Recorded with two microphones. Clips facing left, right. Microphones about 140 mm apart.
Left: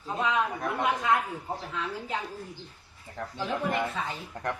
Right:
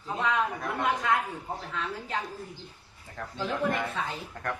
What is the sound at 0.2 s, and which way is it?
Speech, 20° left (ahead or behind).